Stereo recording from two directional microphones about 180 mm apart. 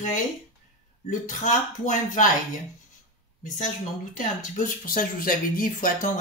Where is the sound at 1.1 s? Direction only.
45° left (ahead or behind).